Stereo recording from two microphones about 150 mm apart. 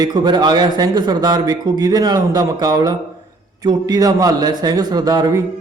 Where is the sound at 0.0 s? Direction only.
25° right (ahead or behind).